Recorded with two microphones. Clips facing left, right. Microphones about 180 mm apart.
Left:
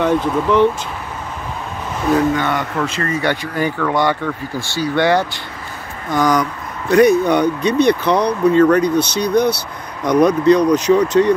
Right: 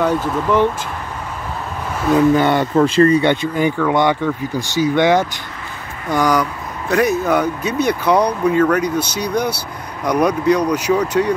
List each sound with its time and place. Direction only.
0.0 s speech: 5° right (ahead or behind)
2.3 s speech: 30° right (ahead or behind); by 11.3 s 10° right (ahead or behind)